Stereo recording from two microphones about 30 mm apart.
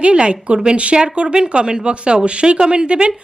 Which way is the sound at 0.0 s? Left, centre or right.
Right.